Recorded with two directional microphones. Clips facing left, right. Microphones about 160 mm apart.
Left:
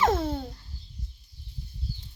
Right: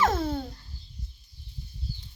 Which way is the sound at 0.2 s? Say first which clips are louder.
Right 1 dB; 20° left (ahead or behind).